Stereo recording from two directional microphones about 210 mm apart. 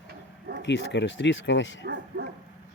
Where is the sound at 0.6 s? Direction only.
55° left (ahead or behind).